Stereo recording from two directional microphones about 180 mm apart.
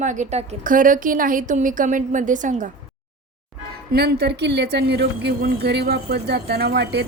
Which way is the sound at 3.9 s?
65° right (ahead or behind).